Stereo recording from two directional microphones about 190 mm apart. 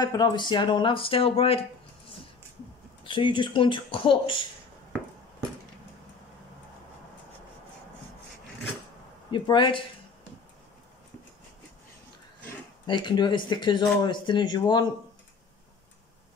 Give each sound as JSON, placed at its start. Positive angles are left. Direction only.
{"t": 0.0, "sound": "speech", "side_deg": 20}
{"t": 3.0, "sound": "speech", "side_deg": 25}
{"t": 9.3, "sound": "speech", "side_deg": 25}
{"t": 12.8, "sound": "speech", "side_deg": 25}